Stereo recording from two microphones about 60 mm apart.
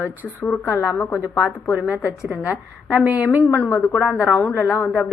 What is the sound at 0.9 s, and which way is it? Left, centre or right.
Speech, left.